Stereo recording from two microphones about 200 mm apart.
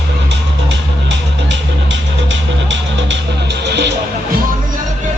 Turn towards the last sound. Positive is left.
turn(degrees=-55)  # may be behind; listen again after turning